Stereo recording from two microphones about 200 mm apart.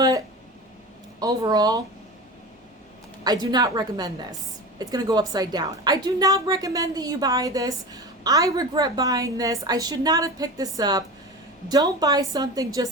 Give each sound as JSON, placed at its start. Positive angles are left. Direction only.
{"t": 1.2, "sound": "a woman's voice", "side_deg": -20}
{"t": 3.2, "sound": "a woman's voice", "side_deg": -20}